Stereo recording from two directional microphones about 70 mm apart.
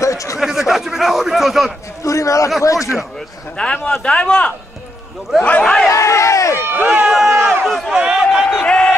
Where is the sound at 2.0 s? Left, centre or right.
Left.